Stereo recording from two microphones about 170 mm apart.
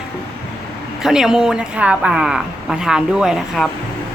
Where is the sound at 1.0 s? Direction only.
5° right (ahead or behind).